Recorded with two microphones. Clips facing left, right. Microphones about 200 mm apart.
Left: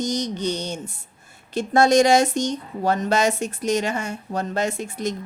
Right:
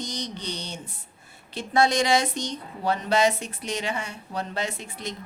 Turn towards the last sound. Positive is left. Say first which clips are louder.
# left 8 dB
turn(degrees=45)  # may be behind; listen again after turning